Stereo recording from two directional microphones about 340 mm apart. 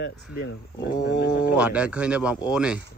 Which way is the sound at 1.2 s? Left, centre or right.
Centre.